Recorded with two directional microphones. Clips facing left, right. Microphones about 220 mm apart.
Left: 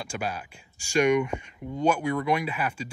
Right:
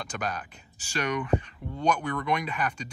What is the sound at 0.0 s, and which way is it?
Speech, 10° left (ahead or behind).